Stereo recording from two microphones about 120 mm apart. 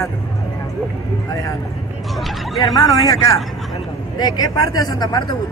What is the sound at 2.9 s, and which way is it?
Speech, 30° left (ahead or behind).